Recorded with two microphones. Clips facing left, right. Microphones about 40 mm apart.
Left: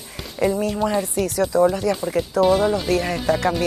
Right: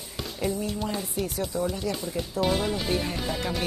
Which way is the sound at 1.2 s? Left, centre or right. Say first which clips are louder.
Left 10 dB; left.